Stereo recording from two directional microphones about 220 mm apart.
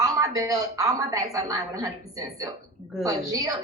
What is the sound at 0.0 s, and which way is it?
A woman's voice, 15° right (ahead or behind).